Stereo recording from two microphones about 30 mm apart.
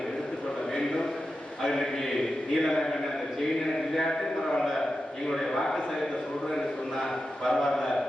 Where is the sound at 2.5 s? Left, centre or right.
Centre.